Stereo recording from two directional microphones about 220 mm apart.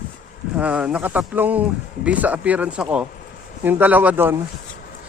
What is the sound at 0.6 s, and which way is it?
Speech, 5° right (ahead or behind).